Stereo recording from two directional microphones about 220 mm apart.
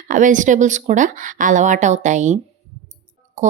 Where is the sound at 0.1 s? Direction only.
35° right (ahead or behind).